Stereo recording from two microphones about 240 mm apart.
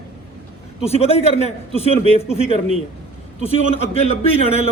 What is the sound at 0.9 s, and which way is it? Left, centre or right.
A man's voice, left.